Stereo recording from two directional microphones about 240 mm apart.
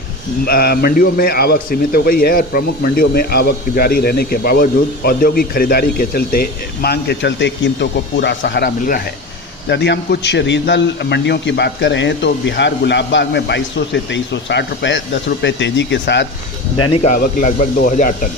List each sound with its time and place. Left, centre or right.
0.4 s a man's voice: left
16.9 s speech: left